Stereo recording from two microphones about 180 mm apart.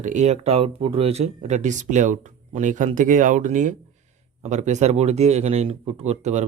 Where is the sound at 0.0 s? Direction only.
40° right (ahead or behind).